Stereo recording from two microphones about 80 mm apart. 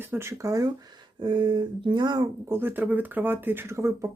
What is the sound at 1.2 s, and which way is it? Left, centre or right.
Speech, right.